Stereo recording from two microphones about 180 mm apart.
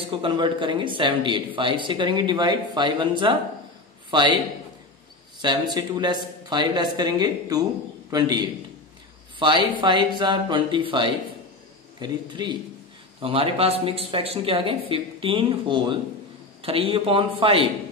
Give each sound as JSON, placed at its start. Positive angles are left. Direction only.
{"t": 0.2, "sound": "a man's voice", "side_deg": -25}
{"t": 5.4, "sound": "speech", "side_deg": -25}